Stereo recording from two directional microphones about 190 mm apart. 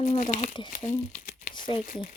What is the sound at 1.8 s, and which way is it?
Speech, 45° left (ahead or behind).